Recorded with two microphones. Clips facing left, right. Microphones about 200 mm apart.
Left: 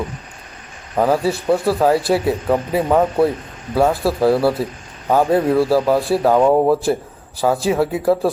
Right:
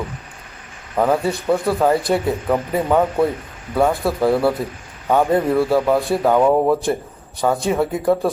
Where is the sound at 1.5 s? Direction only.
5° left (ahead or behind).